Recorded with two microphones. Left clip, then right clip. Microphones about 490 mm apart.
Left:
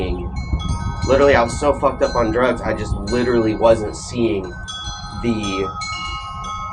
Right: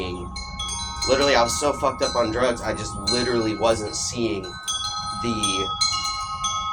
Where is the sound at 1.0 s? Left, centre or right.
Right.